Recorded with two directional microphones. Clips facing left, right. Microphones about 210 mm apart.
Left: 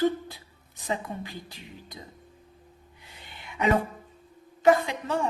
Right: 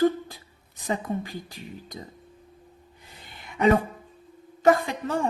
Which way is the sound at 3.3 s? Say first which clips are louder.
Right 2 dB; 45° right (ahead or behind).